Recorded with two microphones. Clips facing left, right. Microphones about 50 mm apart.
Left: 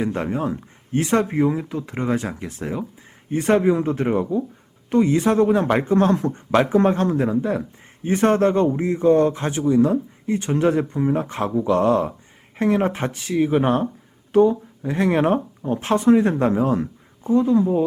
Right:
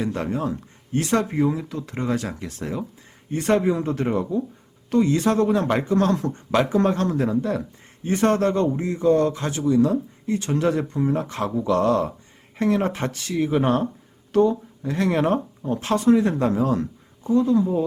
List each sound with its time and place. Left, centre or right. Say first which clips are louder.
0.0 s speech: left 2 dB; left